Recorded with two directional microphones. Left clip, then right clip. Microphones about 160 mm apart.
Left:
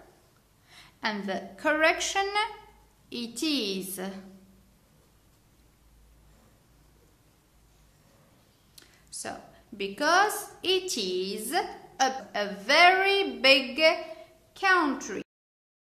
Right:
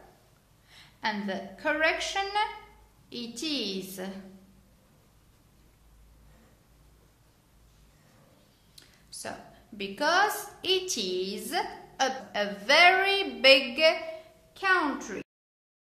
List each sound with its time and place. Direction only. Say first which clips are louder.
0.7 s a woman's voice: even; 25° left (ahead or behind)
8.7 s a sound: left 2 dB; 20° left (ahead or behind)
9.8 s a woman's voice: left 2 dB; 20° left (ahead or behind)